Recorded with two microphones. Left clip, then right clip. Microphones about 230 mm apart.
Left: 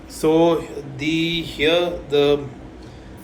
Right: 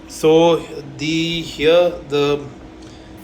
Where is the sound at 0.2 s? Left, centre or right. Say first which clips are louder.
Right 4 dB; left.